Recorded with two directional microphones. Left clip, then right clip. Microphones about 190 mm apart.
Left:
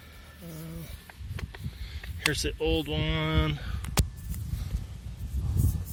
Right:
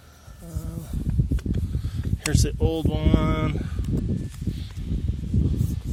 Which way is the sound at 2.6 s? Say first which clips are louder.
Right 2 dB; 20° right (ahead or behind).